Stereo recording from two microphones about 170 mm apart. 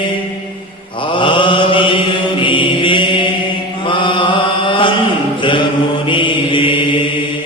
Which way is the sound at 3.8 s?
30° left (ahead or behind).